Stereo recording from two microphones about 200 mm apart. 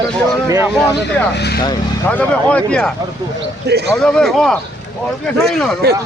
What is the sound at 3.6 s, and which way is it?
Speech, 55° right (ahead or behind).